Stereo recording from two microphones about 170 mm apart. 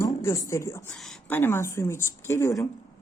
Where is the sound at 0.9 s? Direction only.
Centre (ahead or behind).